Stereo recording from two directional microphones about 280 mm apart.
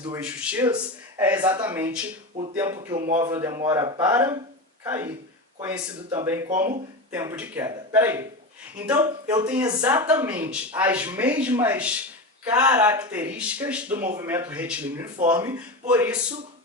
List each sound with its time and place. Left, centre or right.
0.3 s speech: centre; by 3.3 s right
3.3 s speech: centre
6.1 s speech: centre
6.5 s speech: right
7.1 s speech: centre